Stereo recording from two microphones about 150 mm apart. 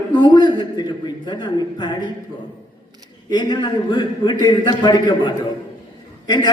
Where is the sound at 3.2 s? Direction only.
30° left (ahead or behind).